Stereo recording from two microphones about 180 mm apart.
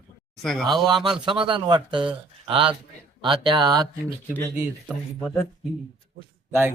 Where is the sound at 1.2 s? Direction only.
30° right (ahead or behind).